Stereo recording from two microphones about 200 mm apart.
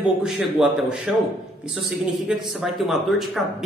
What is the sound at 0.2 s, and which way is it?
Speech, 5° right (ahead or behind).